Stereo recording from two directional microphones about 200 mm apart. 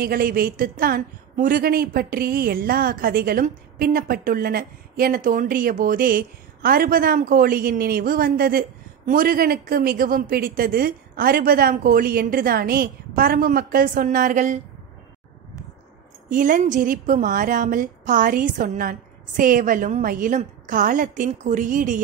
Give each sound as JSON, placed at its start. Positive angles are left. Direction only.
{"t": 0.0, "sound": "a woman's voice", "side_deg": -45}
{"t": 16.3, "sound": "a woman's voice", "side_deg": -40}